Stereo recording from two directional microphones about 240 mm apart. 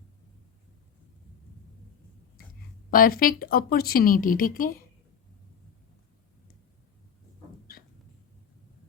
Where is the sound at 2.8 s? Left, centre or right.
Left.